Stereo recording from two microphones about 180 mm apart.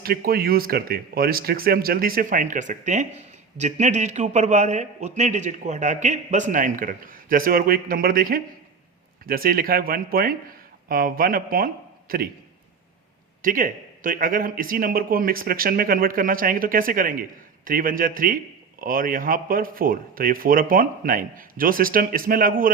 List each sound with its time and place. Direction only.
0.0 s a man's voice: 55° right (ahead or behind)
13.4 s speech: 50° right (ahead or behind)